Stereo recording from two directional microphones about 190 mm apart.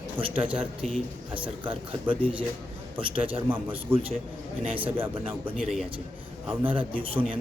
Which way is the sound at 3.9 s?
10° right (ahead or behind).